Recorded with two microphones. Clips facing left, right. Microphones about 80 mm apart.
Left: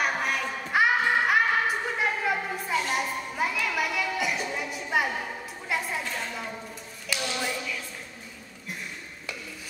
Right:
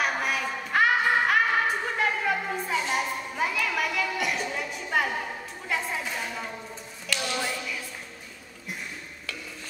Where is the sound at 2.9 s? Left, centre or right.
Centre.